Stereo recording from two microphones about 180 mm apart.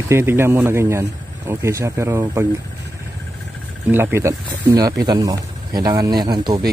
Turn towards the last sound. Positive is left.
turn(degrees=-25)  # may be behind; listen again after turning